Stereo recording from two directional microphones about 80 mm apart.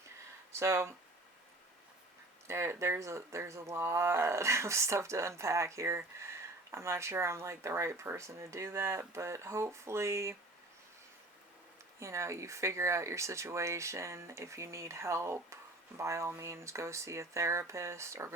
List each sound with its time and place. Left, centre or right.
0.5 s speech: right
2.5 s speech: right
11.9 s speech: right